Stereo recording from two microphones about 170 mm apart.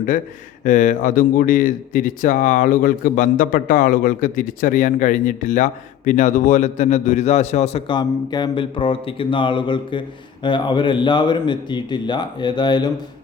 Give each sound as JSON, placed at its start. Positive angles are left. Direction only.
{"t": 0.6, "sound": "speech", "side_deg": 50}
{"t": 7.9, "sound": "speech", "side_deg": 25}